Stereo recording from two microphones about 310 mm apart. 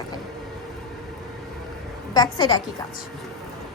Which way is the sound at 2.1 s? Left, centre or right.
Centre.